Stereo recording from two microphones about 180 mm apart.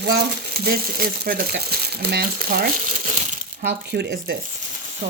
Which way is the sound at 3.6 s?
65° right (ahead or behind).